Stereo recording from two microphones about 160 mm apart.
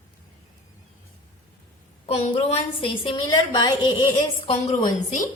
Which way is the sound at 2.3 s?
35° left (ahead or behind).